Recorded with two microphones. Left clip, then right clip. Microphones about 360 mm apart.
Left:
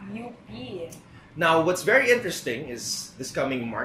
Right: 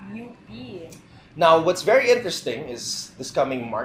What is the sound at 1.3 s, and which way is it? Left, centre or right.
Speech, centre.